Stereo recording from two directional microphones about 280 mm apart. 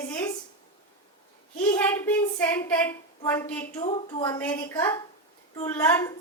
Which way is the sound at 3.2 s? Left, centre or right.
Centre.